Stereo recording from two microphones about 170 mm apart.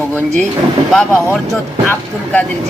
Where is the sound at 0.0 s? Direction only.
10° left (ahead or behind).